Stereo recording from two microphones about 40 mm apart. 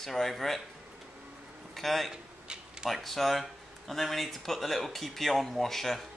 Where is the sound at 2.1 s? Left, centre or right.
Centre.